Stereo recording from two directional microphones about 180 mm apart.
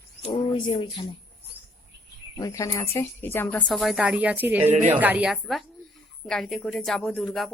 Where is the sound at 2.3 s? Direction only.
20° left (ahead or behind).